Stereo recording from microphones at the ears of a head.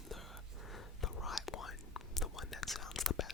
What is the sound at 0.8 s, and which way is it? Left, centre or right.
Whispering, left.